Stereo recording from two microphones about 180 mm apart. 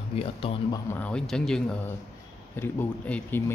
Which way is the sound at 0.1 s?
30° left (ahead or behind).